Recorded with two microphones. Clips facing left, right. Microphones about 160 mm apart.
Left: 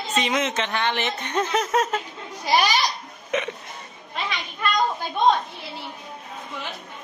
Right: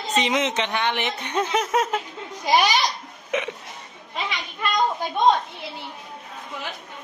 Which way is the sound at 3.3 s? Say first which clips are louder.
Even; 15° right (ahead or behind).